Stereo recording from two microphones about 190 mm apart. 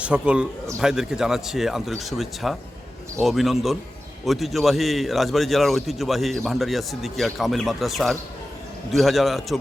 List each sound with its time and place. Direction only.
0.0 s a man's voice: 5° right (ahead or behind)